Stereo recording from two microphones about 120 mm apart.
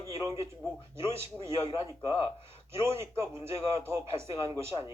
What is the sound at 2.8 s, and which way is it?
A man's voice, 20° right (ahead or behind).